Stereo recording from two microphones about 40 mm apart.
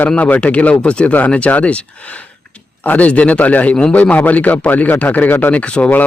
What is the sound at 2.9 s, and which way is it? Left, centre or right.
A man's voice, left.